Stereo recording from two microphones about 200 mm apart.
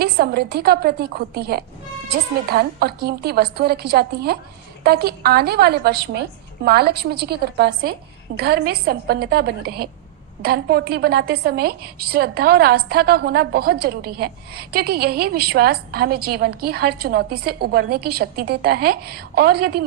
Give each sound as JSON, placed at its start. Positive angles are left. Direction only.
{"t": 0.0, "sound": "a woman's voice", "side_deg": -50}